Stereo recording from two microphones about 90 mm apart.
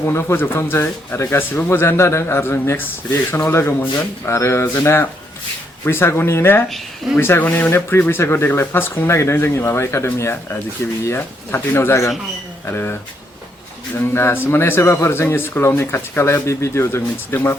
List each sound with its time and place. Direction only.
0.0 s speech: 30° left (ahead or behind)
6.7 s speech: centre (ahead or behind)
7.2 s speech: 25° left (ahead or behind)